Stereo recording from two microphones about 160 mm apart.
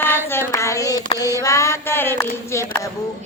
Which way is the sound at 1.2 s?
20° left (ahead or behind).